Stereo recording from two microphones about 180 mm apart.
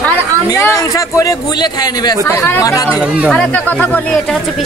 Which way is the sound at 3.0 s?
5° right (ahead or behind).